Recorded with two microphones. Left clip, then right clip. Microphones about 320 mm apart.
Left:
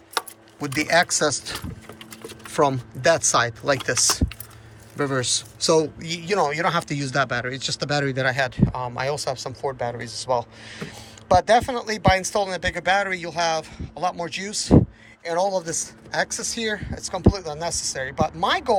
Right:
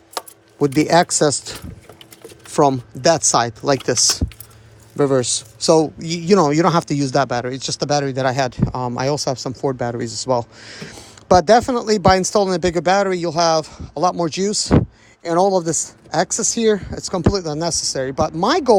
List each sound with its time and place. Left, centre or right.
0.6 s a man's voice: centre
4.9 s a man's voice: centre